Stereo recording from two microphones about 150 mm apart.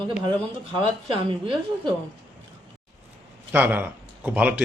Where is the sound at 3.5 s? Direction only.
10° right (ahead or behind).